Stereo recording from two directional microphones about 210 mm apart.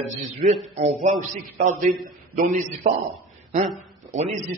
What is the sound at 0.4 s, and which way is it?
A man's voice, 35° right (ahead or behind).